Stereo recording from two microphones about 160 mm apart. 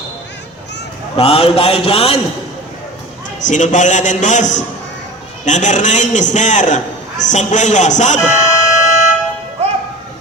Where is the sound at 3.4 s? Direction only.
50° left (ahead or behind).